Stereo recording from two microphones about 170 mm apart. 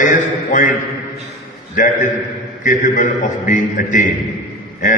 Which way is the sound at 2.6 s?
50° left (ahead or behind).